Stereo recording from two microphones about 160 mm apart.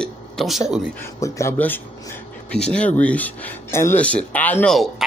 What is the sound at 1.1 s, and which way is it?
Speech, 20° left (ahead or behind).